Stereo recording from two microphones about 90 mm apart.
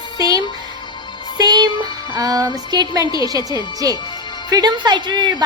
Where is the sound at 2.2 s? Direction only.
40° right (ahead or behind).